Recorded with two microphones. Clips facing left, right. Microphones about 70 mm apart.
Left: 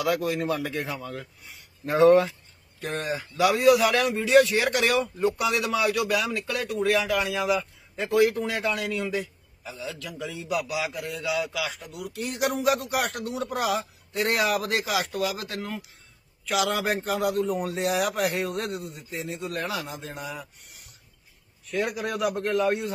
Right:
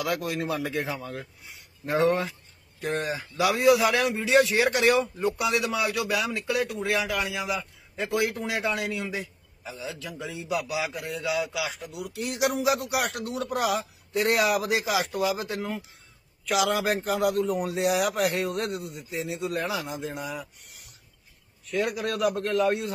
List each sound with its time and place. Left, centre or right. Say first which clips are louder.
0.0 s a man's voice: left 3 dB; centre
2.8 s speech: right 2 dB; centre
3.6 s a man's voice: even; centre
9.8 s a man's voice: left 1 dB; right
11.1 s speech: even; centre
12.2 s a man's voice: right 1 dB; centre
14.9 s a man's voice: right 1 dB; centre
16.4 s a man's voice: right 1 dB; centre